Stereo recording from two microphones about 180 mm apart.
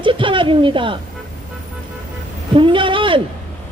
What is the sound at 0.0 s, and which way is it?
Speech, 30° right (ahead or behind).